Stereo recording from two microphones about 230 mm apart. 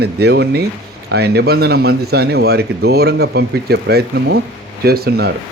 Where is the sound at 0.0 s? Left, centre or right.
Right.